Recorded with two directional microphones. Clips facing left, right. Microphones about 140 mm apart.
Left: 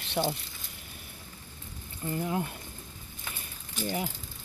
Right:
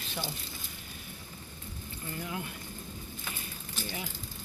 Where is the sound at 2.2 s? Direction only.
40° left (ahead or behind).